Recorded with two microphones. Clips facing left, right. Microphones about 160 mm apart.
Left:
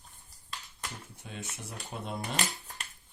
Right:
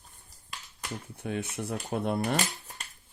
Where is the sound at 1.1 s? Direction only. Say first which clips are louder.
Right 10 dB; 60° right (ahead or behind).